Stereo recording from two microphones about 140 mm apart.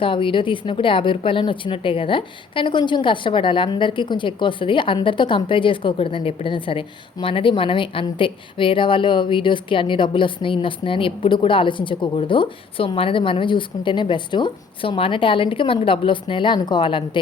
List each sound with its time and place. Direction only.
0.0 s a woman's voice: 35° left (ahead or behind)